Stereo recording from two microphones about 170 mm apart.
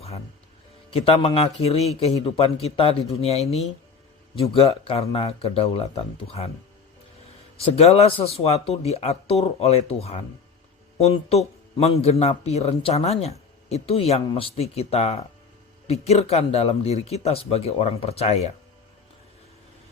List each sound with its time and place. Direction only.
0.9 s a man's voice: 35° left (ahead or behind)
7.6 s a man's voice: 35° left (ahead or behind)